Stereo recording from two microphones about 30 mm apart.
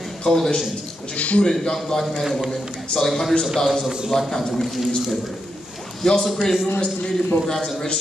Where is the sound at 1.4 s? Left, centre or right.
Centre.